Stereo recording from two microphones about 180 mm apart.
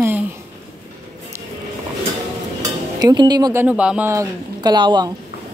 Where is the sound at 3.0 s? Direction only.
25° right (ahead or behind).